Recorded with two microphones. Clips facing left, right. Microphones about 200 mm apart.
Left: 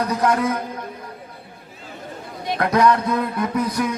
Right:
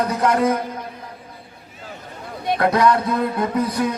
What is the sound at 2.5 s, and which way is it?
A man's voice, 30° right (ahead or behind).